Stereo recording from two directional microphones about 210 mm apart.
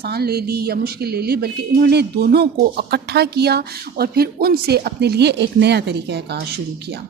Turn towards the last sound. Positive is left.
turn(degrees=-50)  # may be behind; listen again after turning